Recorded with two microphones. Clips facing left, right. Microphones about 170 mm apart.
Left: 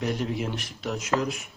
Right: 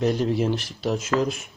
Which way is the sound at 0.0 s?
35° right (ahead or behind).